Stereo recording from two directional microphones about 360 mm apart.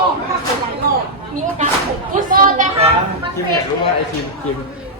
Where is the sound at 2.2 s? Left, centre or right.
Right.